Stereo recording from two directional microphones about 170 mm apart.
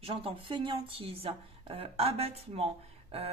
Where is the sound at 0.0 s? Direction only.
35° right (ahead or behind).